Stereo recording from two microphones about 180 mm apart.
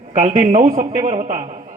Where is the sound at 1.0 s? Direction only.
35° right (ahead or behind).